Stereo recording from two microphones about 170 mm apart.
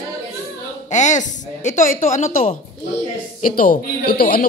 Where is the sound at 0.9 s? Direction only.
45° left (ahead or behind).